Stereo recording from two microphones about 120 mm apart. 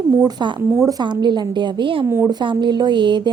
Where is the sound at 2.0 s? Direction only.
20° right (ahead or behind).